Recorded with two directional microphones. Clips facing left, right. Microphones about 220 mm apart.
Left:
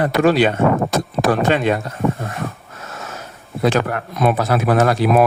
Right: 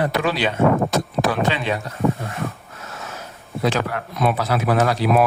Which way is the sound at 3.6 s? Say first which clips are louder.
Left 4 dB; 50° left (ahead or behind).